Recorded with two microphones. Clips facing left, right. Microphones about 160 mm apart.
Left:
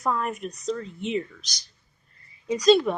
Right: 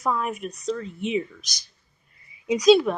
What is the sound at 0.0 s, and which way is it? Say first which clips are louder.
A woman's voice: right 1 dB; centre (ahead or behind).